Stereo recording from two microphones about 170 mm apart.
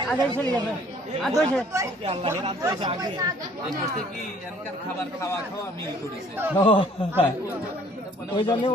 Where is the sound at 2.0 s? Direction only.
35° right (ahead or behind).